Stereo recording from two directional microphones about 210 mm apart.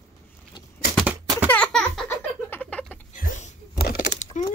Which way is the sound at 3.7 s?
50° left (ahead or behind).